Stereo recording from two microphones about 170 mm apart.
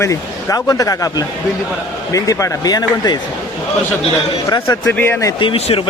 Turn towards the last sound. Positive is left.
turn(degrees=35)  # may be behind; listen again after turning